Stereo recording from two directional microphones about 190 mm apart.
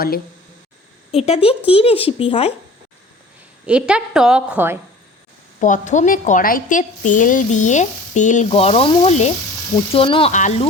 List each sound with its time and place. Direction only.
1.1 s a woman's voice: 30° left (ahead or behind)
3.7 s a woman's voice: 5° right (ahead or behind)
5.5 s a woman's voice: 40° left (ahead or behind)